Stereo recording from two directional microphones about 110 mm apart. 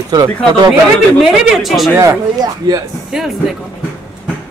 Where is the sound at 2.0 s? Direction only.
30° right (ahead or behind).